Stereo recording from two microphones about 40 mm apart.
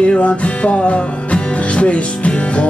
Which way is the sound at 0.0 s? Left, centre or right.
Left.